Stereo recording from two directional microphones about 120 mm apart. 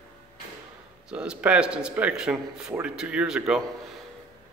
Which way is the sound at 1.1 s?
10° right (ahead or behind).